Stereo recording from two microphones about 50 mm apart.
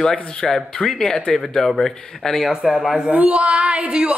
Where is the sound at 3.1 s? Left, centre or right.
Right.